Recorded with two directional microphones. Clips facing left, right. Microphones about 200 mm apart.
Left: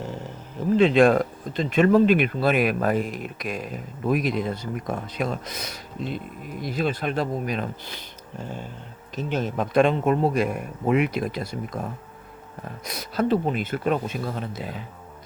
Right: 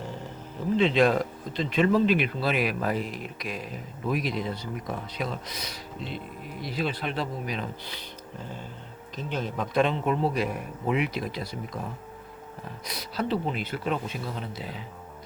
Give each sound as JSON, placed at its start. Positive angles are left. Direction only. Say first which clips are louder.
{"t": 0.8, "sound": "speech", "louder": "left 5 dB", "side_deg": 50}
{"t": 9.3, "sound": "speech", "louder": "left 5 dB", "side_deg": 50}
{"t": 12.8, "sound": "speech", "louder": "left 6 dB", "side_deg": 45}